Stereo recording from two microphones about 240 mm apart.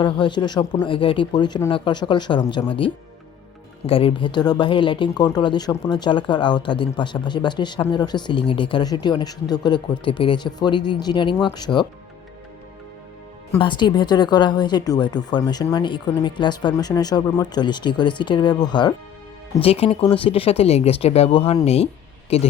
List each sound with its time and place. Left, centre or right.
0.0 s speech: centre
13.6 s speech: centre